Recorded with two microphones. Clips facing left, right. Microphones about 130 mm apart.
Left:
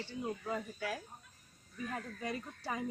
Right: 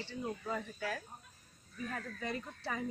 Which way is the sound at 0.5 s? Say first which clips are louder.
Even; 5° left (ahead or behind).